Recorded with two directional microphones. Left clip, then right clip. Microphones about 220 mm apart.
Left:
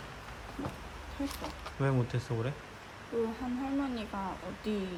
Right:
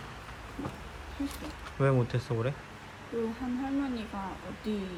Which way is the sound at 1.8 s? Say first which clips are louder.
Right 5 dB; 10° left (ahead or behind).